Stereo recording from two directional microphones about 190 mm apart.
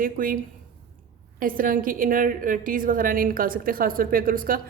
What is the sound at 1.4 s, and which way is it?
A woman's voice, 45° right (ahead or behind).